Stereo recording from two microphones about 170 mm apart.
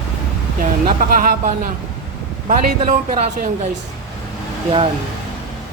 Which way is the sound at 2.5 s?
50° right (ahead or behind).